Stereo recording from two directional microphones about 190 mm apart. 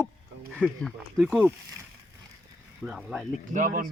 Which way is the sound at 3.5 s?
45° right (ahead or behind).